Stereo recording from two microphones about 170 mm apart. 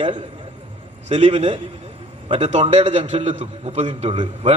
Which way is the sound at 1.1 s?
35° right (ahead or behind).